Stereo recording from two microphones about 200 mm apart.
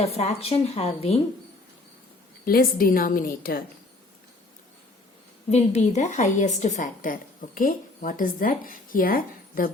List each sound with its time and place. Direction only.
0.0 s a woman's voice: 30° left (ahead or behind)
2.4 s a woman's voice: 45° left (ahead or behind)
5.5 s a woman's voice: 35° left (ahead or behind)